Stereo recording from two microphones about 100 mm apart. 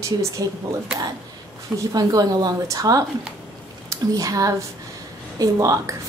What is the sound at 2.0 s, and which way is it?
A woman's voice, 40° right (ahead or behind).